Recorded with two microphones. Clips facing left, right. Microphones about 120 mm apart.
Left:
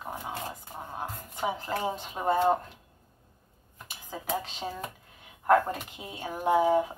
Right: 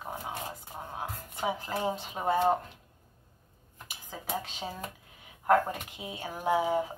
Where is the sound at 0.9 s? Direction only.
Centre (ahead or behind).